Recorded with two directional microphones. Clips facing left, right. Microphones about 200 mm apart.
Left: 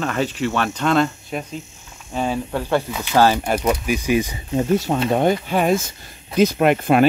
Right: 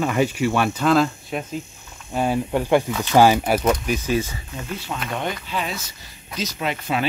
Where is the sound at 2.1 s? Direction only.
15° right (ahead or behind).